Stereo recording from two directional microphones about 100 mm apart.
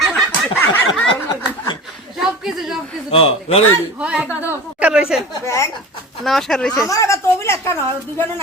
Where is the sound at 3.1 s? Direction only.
70° left (ahead or behind).